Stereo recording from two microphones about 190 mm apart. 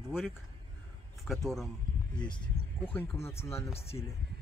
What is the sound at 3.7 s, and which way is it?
Speech, 30° left (ahead or behind).